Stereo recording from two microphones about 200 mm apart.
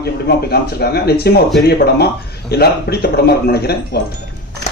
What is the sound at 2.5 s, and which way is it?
Speech, 55° left (ahead or behind).